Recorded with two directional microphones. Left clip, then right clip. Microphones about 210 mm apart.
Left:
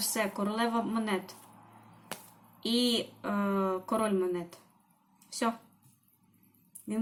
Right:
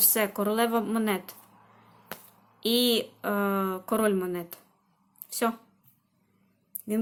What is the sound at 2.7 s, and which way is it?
Speech, 50° right (ahead or behind).